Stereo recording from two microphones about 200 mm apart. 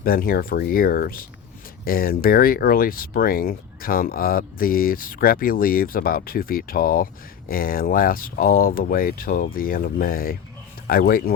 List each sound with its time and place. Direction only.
0.0 s speech: 45° left (ahead or behind)